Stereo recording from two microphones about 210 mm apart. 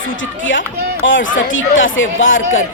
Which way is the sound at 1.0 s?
65° left (ahead or behind).